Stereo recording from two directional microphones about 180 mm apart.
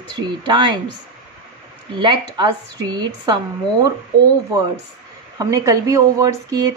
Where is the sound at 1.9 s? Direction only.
25° right (ahead or behind).